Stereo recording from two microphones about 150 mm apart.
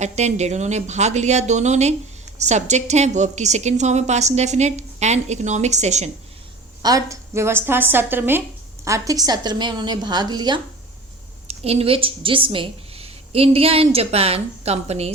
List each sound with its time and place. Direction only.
0.0 s a woman's voice: 50° right (ahead or behind)
6.8 s a woman's voice: 20° right (ahead or behind)
11.4 s a woman's voice: 40° right (ahead or behind)